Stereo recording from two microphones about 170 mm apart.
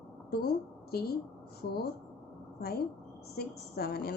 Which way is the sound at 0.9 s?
65° left (ahead or behind).